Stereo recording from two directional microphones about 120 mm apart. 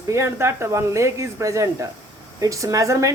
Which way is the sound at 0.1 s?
25° right (ahead or behind).